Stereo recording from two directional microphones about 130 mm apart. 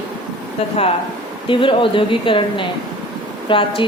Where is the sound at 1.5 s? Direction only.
40° left (ahead or behind).